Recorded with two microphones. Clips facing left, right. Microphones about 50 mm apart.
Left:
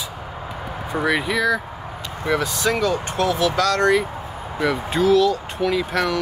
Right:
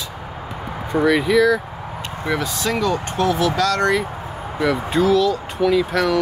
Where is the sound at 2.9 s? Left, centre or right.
Right.